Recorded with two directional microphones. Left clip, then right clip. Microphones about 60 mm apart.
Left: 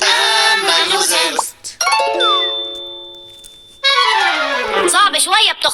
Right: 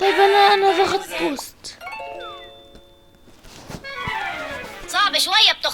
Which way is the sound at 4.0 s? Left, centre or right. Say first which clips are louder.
Left 10 dB; left.